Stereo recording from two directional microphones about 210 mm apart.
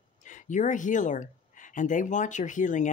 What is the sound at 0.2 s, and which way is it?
Speech, 35° left (ahead or behind).